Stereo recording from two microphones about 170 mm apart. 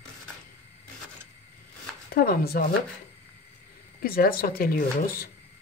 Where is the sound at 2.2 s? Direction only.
65° left (ahead or behind).